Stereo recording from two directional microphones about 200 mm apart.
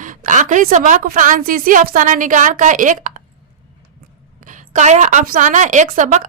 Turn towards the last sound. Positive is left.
turn(degrees=-35)  # may be behind; listen again after turning